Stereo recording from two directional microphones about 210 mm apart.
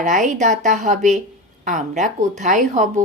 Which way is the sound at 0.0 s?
35° right (ahead or behind).